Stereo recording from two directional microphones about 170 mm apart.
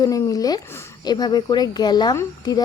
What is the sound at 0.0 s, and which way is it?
Speech, 20° left (ahead or behind).